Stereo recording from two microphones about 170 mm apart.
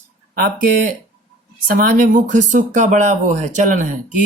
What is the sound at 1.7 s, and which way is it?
Speech, 55° right (ahead or behind).